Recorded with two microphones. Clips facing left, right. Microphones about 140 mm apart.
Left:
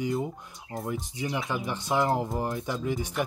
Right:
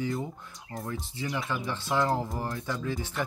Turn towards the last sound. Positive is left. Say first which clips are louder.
# left 3 dB
turn(degrees=15)  # may be behind; listen again after turning